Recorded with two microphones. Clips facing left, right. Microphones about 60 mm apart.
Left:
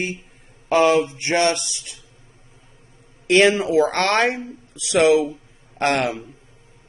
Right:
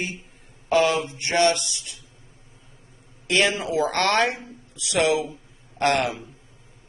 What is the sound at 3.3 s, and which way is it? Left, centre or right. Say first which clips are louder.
A man's voice: left 7 dB; left.